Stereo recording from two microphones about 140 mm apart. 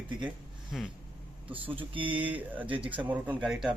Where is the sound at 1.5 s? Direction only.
40° right (ahead or behind).